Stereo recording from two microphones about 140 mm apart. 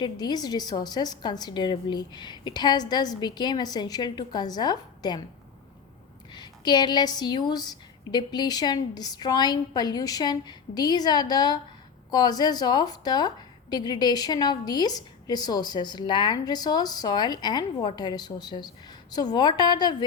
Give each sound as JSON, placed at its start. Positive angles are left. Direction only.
{"t": 0.0, "sound": "a woman's voice", "side_deg": 30}
{"t": 6.3, "sound": "a woman's voice", "side_deg": 30}